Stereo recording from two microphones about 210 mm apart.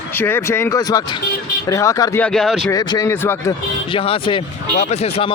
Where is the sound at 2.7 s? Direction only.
15° left (ahead or behind).